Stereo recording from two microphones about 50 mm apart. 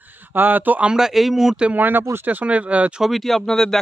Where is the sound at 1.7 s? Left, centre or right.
Right.